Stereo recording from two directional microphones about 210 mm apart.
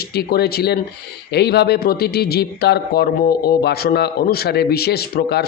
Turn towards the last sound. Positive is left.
turn(degrees=50)  # may be behind; listen again after turning